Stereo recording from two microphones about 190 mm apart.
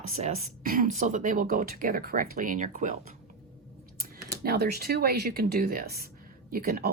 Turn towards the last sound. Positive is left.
turn(degrees=-50)  # may be behind; listen again after turning